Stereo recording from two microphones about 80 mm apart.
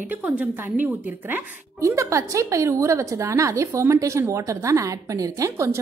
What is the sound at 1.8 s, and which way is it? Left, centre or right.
A woman's voice, right.